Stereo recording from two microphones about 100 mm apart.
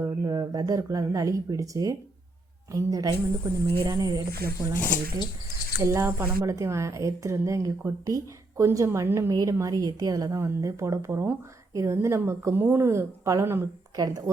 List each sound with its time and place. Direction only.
0.0 s speech: 35° right (ahead or behind)
5.8 s a woman's voice: 30° right (ahead or behind)
13.9 s speech: 40° right (ahead or behind)